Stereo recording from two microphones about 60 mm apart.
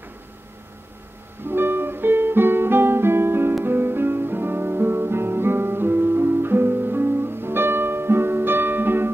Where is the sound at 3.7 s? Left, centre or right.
Right.